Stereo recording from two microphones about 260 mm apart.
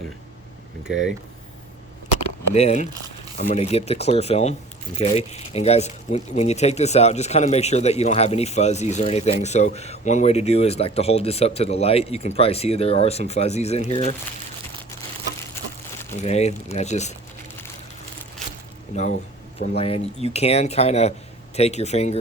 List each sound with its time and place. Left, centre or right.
0.9 s speech: centre
2.2 s a sound: left
3.3 s speech: left
16.2 s speech: left
19.5 s speech: left